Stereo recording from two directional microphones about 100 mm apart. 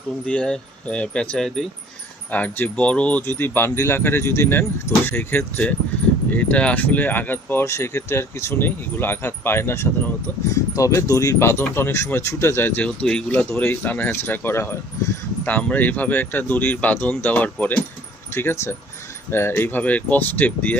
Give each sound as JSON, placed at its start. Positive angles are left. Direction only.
{"t": 0.3, "sound": "speech", "side_deg": 10}
{"t": 2.3, "sound": "speech", "side_deg": 15}
{"t": 19.3, "sound": "speech", "side_deg": 25}